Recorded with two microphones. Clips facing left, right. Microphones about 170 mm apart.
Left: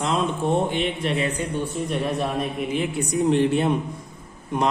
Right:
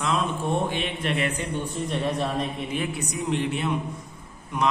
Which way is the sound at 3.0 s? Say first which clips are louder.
Left 11 dB; 35° left (ahead or behind).